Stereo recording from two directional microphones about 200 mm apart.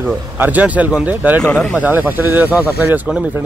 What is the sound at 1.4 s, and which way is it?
Speech, centre (ahead or behind).